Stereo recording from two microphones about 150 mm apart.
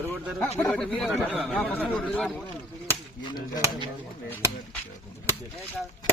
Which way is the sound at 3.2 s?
30° left (ahead or behind).